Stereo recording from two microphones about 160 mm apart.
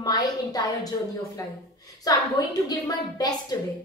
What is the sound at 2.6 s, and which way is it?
Speech, 25° left (ahead or behind).